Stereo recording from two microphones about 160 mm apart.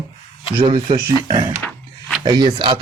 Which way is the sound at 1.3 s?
30° right (ahead or behind).